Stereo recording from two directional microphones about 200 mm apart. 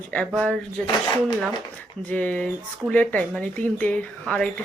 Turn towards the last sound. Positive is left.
turn(degrees=5)  # may be behind; listen again after turning